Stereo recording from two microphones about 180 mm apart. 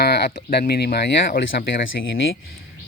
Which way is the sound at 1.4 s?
80° left.